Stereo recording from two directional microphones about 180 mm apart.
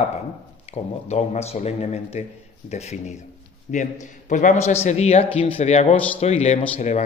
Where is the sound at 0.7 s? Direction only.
35° left (ahead or behind).